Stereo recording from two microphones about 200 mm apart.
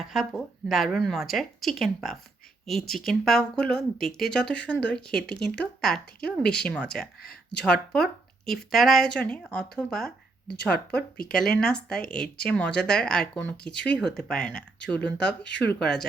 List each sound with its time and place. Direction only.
0.0 s speech: centre (ahead or behind)
7.2 s speech: 50° left (ahead or behind)
7.6 s speech: 5° left (ahead or behind)
15.4 s speech: 60° left (ahead or behind)
15.8 s speech: 5° left (ahead or behind)